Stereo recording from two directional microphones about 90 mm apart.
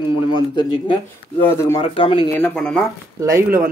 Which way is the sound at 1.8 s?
85° left.